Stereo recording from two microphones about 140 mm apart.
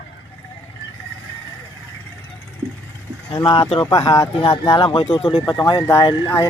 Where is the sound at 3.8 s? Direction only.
25° left (ahead or behind).